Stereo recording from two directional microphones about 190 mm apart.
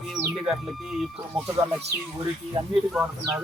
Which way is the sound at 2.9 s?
5° right (ahead or behind).